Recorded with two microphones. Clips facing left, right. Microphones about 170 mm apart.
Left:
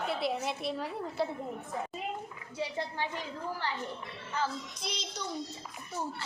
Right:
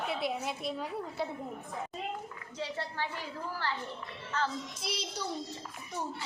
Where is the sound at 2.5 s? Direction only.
15° left (ahead or behind).